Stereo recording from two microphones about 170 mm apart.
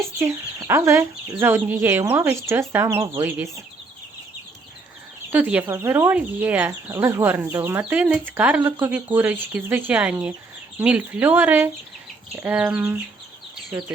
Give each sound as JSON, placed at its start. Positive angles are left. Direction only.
{"t": 0.7, "sound": "speech", "side_deg": -15}
{"t": 5.3, "sound": "speech", "side_deg": -10}